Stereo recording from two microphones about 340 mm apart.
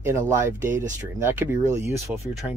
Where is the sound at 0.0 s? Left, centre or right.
Centre.